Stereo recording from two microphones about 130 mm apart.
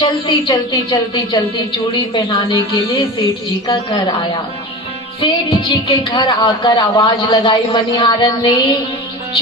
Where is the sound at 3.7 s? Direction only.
35° left (ahead or behind).